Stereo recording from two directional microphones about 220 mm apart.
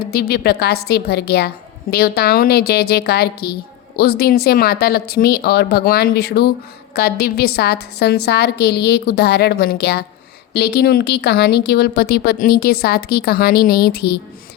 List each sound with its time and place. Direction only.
0.0 s a woman's voice: 45° left (ahead or behind)